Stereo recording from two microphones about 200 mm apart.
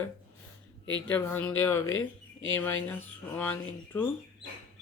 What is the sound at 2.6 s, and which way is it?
Speech, 10° left (ahead or behind).